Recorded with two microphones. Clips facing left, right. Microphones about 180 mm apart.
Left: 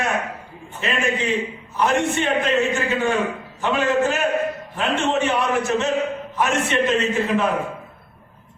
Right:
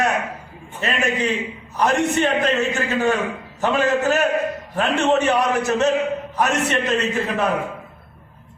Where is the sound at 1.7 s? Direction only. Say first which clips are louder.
Right 1 dB; 40° right (ahead or behind).